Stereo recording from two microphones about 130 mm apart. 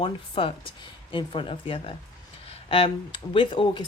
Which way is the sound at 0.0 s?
40° left (ahead or behind).